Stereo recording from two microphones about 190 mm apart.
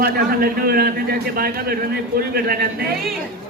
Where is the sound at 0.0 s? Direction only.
55° right (ahead or behind).